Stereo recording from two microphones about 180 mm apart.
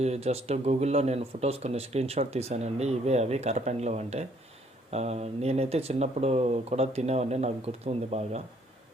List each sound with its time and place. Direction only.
0.0 s speech: 35° right (ahead or behind)